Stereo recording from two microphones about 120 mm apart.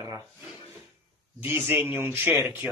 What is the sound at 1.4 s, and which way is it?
A man's voice, 20° right (ahead or behind).